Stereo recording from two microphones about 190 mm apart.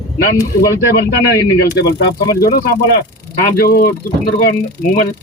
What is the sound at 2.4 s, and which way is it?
Speech, 50° left (ahead or behind).